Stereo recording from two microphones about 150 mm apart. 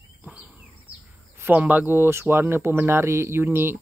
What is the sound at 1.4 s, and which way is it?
Speech, 10° right (ahead or behind).